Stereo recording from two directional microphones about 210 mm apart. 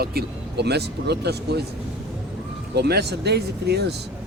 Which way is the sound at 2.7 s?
50° right (ahead or behind).